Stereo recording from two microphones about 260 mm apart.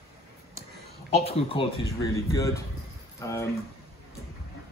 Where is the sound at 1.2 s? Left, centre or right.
Left.